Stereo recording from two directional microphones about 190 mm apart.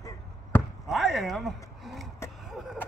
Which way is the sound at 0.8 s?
Centre (ahead or behind).